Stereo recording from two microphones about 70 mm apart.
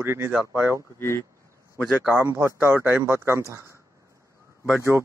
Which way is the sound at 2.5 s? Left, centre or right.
Right.